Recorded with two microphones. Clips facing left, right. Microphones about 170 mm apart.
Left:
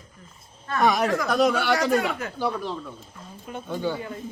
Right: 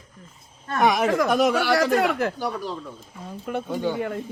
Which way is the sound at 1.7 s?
65° right (ahead or behind).